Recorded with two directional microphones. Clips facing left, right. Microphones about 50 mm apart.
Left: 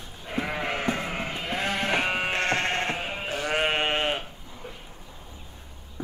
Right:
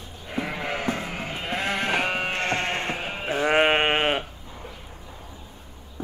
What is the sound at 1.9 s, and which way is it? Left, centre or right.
Music, centre.